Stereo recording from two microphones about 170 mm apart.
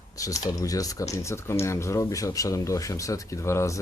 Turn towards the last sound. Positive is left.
turn(degrees=15)  # may be behind; listen again after turning